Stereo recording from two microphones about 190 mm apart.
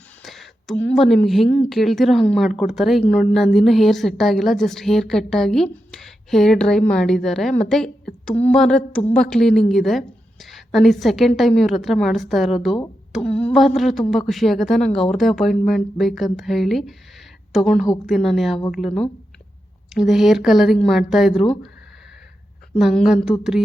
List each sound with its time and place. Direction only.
0.3 s a woman's voice: centre (ahead or behind)
19.9 s a woman's voice: centre (ahead or behind)
21.3 s speech: 30° left (ahead or behind)
22.7 s a woman's voice: centre (ahead or behind)